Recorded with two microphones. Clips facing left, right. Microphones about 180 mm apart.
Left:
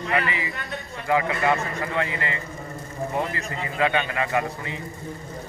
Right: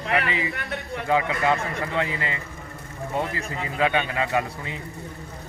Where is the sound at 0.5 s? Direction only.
65° right (ahead or behind).